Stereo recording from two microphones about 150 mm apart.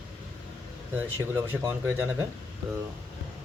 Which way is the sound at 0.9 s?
15° right (ahead or behind).